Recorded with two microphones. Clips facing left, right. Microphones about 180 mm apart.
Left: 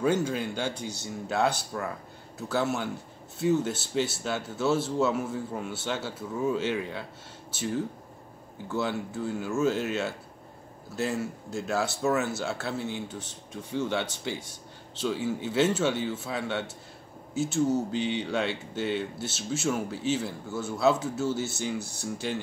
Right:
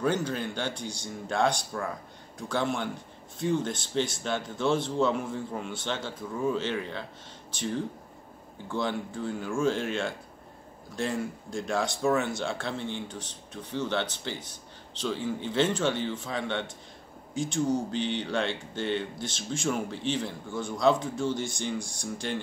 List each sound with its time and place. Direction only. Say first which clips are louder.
0.0 s speech: left 2 dB; 10° left (ahead or behind)